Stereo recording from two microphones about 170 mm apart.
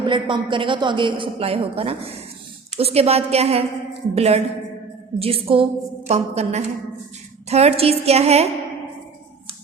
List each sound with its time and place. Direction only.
0.0 s a woman's voice: 30° right (ahead or behind)